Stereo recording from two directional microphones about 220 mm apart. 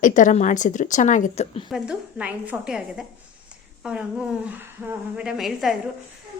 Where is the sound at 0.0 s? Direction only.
35° left (ahead or behind).